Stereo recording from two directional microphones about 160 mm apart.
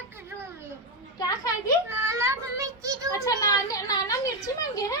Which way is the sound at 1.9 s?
15° right (ahead or behind).